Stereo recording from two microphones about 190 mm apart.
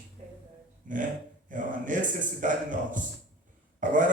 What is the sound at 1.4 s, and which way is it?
Speech, 45° right (ahead or behind).